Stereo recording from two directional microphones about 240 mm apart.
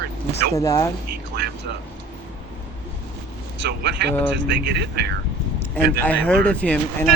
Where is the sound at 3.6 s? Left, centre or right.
Right.